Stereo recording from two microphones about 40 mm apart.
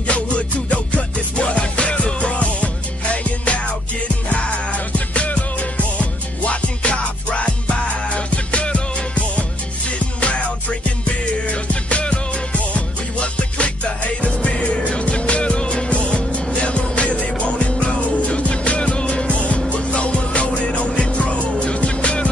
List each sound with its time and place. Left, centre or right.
0.0 s music: left
11.6 s music: left